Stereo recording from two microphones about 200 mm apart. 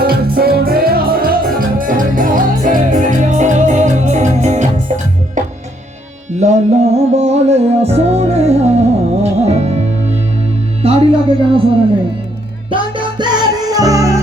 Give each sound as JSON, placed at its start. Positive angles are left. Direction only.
{"t": 0.0, "sound": "music", "side_deg": -50}
{"t": 6.3, "sound": "music", "side_deg": -35}
{"t": 10.8, "sound": "music", "side_deg": -30}
{"t": 12.7, "sound": "music", "side_deg": -25}